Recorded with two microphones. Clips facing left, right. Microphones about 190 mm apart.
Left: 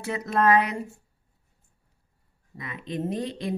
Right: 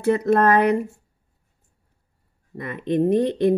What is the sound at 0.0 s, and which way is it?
Speech, 55° right (ahead or behind).